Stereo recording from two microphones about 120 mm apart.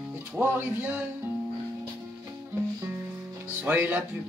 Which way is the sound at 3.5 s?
15° right (ahead or behind).